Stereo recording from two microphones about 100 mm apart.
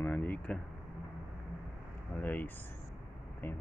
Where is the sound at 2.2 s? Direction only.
20° left (ahead or behind).